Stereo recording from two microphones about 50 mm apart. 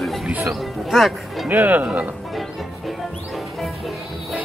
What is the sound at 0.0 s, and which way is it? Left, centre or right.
Music, centre.